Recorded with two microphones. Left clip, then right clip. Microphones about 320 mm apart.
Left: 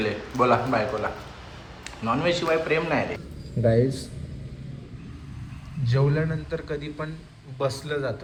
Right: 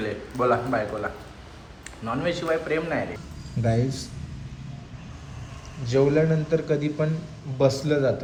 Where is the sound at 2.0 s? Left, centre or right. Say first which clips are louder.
Left 3 dB; centre.